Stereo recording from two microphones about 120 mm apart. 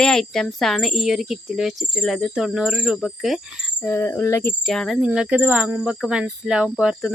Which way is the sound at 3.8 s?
15° left (ahead or behind).